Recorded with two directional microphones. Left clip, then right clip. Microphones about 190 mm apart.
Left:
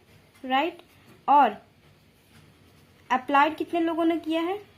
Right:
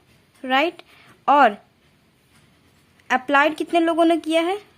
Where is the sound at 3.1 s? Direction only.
30° right (ahead or behind).